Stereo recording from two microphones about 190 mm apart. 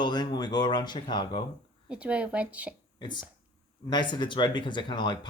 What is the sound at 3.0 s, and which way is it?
Speech, 25° left (ahead or behind).